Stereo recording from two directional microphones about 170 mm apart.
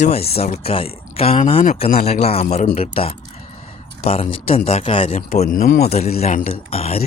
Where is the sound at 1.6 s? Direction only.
45° left (ahead or behind).